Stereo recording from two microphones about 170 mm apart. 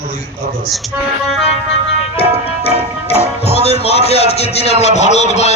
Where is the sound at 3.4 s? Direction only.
40° left (ahead or behind).